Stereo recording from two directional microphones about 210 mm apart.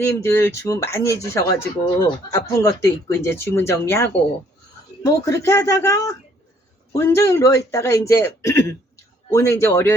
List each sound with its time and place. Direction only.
0.2 s speech: 10° left (ahead or behind)